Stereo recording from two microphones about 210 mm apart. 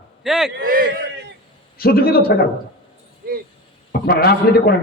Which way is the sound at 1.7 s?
45° left (ahead or behind).